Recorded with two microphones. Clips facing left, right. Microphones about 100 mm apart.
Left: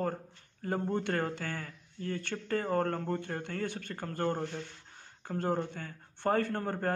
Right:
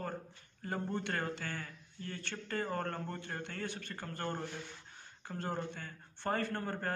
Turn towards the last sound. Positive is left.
turn(degrees=50)  # may be behind; listen again after turning